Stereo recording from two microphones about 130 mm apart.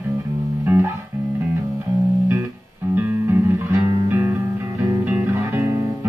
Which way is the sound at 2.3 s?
15° right (ahead or behind).